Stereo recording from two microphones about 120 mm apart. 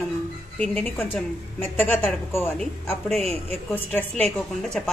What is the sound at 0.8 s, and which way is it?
A woman's voice, 15° left (ahead or behind).